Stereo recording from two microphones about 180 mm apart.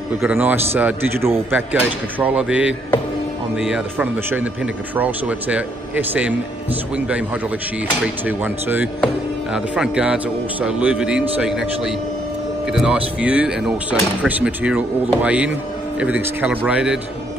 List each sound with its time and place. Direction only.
0.1 s speech: 10° right (ahead or behind)
8.3 s a man's voice: 10° right (ahead or behind)